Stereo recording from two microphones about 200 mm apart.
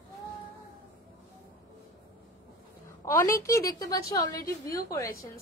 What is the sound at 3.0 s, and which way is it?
A woman's voice, 15° left (ahead or behind).